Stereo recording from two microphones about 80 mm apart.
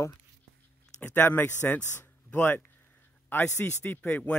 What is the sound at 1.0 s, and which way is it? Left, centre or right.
A man's voice, left.